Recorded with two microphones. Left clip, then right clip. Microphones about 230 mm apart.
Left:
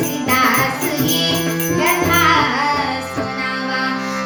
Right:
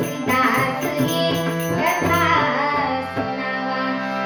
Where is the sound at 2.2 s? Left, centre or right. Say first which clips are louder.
Left 4 dB; left.